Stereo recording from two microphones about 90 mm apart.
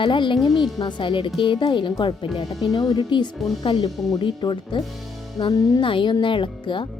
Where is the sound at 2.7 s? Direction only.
50° left (ahead or behind).